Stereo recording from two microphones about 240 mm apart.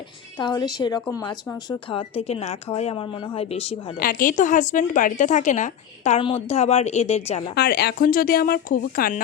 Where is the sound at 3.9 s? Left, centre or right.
Left.